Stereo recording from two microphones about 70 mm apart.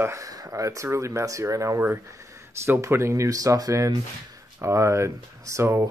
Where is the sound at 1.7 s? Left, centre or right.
Right.